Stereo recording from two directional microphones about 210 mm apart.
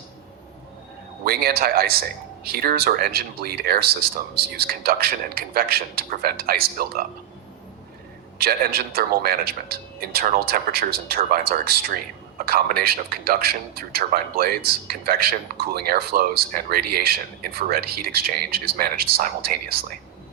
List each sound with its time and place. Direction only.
1.2 s a man's voice: 45° right (ahead or behind)
8.4 s a man's voice: 45° right (ahead or behind)